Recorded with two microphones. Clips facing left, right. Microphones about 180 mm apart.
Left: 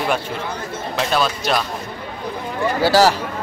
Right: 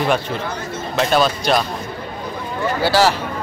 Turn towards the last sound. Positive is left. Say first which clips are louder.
# left 1 dB
turn(degrees=40)  # may be behind; listen again after turning